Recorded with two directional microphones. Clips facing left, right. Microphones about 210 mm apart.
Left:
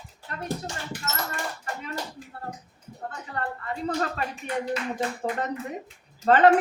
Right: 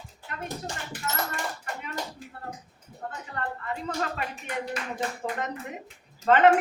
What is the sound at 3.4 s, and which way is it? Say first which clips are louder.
Speech: left 2 dB; 35° left (ahead or behind).